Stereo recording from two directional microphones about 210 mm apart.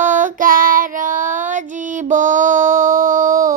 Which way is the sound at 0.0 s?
35° right (ahead or behind).